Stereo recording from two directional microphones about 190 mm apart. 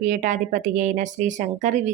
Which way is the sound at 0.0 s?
40° right (ahead or behind).